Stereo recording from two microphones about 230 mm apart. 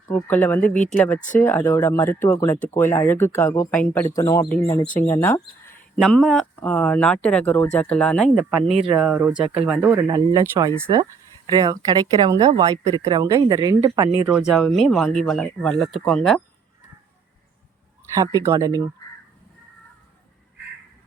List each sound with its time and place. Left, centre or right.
0.1 s speech: centre
0.7 s speech: left
0.9 s speech: centre
14.3 s speech: centre
18.1 s speech: centre